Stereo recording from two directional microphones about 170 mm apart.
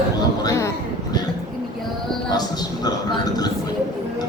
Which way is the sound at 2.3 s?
25° left (ahead or behind).